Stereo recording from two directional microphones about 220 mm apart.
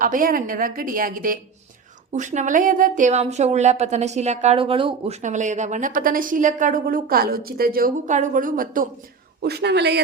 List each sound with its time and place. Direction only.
0.0 s a woman's voice: 40° right (ahead or behind)